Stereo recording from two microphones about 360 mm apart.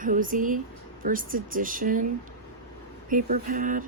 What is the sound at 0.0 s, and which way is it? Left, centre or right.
Speech, right.